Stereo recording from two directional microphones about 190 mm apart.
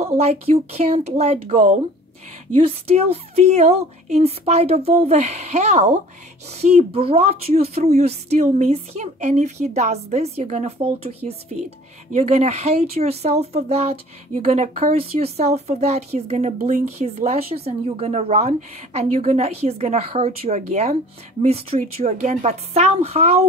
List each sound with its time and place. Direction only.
0.0 s speech: 35° right (ahead or behind)